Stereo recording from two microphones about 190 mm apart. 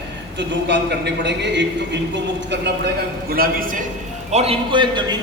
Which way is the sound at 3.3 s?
50° right (ahead or behind).